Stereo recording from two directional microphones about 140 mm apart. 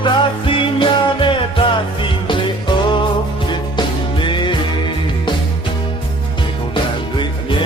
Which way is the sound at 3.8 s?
35° left (ahead or behind).